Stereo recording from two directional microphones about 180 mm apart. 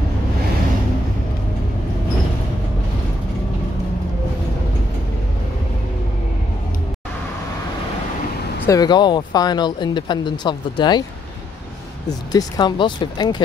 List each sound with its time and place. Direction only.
8.6 s speech: 20° left (ahead or behind)
12.3 s speech: 20° left (ahead or behind)